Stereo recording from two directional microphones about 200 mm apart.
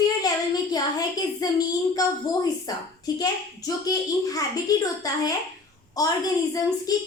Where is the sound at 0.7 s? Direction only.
20° left (ahead or behind).